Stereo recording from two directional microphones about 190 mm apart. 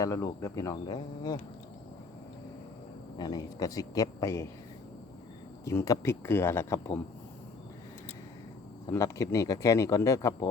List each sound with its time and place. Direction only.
0.0 s speech: 15° left (ahead or behind)
3.2 s speech: 20° left (ahead or behind)
5.6 s speech: 15° left (ahead or behind)
8.9 s speech: 15° left (ahead or behind)